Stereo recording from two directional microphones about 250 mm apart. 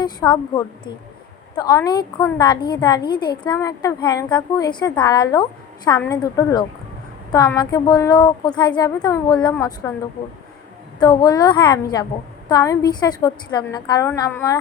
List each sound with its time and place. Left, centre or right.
0.0 s a woman's voice: centre
11.0 s a woman's voice: centre